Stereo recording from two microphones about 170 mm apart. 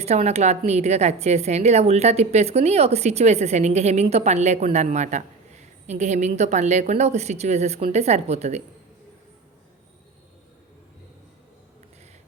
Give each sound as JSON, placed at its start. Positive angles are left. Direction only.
{"t": 0.0, "sound": "a woman's voice", "side_deg": -40}